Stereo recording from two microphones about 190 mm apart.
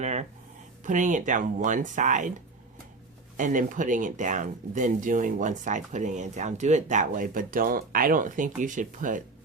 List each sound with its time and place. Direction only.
0.0 s speech: 35° right (ahead or behind)
3.3 s speech: 45° right (ahead or behind)